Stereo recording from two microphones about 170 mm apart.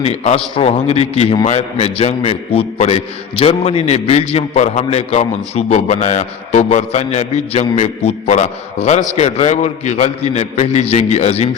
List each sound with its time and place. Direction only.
0.0 s a man's voice: 40° left (ahead or behind)